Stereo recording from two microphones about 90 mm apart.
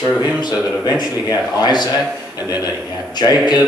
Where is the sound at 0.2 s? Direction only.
50° left (ahead or behind).